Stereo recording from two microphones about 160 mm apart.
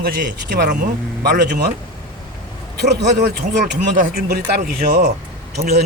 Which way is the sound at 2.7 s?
90° right.